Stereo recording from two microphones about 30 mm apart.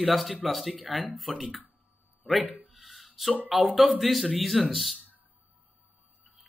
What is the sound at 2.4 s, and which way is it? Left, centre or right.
Speech, right.